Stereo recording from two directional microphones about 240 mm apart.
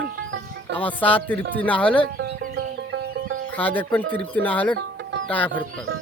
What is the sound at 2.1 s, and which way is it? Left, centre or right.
Music, right.